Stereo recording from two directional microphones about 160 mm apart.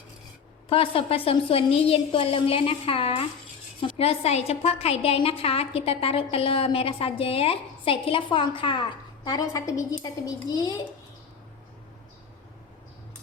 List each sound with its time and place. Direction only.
0.7 s a woman's voice: 35° left (ahead or behind)